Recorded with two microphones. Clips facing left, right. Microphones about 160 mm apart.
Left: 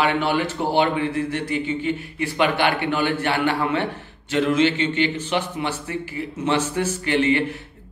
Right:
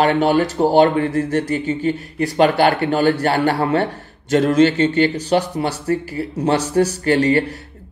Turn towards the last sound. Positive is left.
turn(degrees=-40)  # may be behind; listen again after turning